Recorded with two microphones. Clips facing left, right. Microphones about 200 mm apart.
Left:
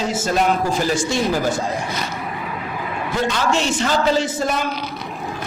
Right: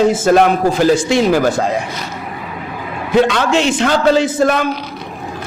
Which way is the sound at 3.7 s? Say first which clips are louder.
Right 5 dB; 60° right (ahead or behind).